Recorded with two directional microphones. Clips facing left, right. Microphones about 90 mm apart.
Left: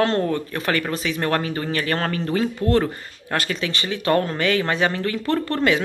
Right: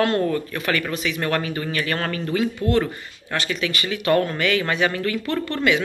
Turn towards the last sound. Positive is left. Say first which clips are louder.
# left 1 dB
turn(degrees=35)  # may be behind; listen again after turning